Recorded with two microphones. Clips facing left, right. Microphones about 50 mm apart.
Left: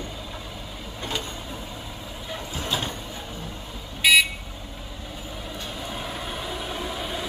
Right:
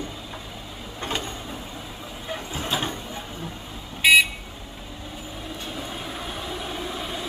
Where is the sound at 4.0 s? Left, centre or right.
Right.